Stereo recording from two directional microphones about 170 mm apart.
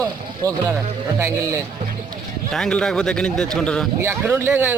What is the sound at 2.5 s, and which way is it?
Speech, 5° left (ahead or behind).